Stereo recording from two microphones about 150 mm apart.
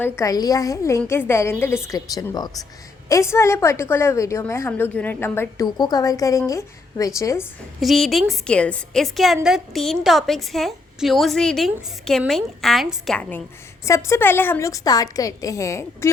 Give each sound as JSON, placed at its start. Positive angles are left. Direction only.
{"t": 0.0, "sound": "a woman's voice", "side_deg": 20}
{"t": 5.6, "sound": "a woman's voice", "side_deg": 25}
{"t": 7.8, "sound": "a woman's voice", "side_deg": 0}
{"t": 13.8, "sound": "a woman's voice", "side_deg": 20}